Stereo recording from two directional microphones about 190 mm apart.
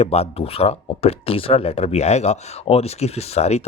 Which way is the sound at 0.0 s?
30° left (ahead or behind).